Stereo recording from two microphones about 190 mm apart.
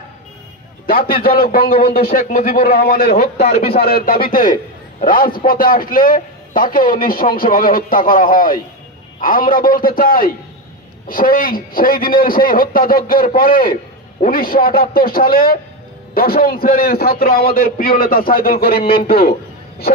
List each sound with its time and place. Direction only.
0.8 s a man's voice: 50° left (ahead or behind)